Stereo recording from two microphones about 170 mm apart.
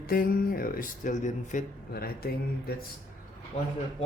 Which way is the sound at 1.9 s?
65° left (ahead or behind).